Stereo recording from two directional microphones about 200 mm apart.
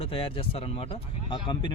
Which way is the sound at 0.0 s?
25° left (ahead or behind).